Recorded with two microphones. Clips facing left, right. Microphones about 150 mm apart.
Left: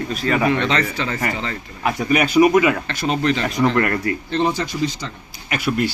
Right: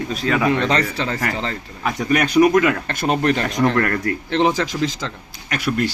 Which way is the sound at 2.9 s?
50° right (ahead or behind).